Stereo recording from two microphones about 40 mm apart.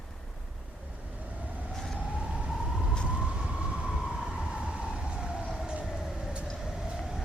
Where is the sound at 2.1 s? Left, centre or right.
Right.